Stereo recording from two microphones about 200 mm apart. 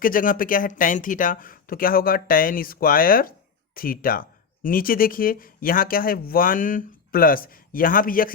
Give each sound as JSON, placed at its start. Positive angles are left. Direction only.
{"t": 0.0, "sound": "speech", "side_deg": 45}